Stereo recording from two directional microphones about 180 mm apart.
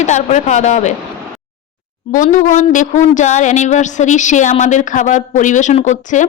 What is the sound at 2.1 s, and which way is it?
Speech, 45° left (ahead or behind).